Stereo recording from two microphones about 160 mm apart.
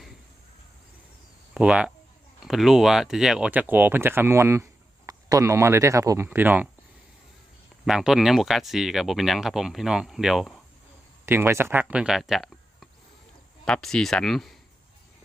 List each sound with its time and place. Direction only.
1.5 s speech: 5° right (ahead or behind)
7.9 s speech: 5° right (ahead or behind)
11.3 s speech: 15° right (ahead or behind); by 14.6 s centre (ahead or behind)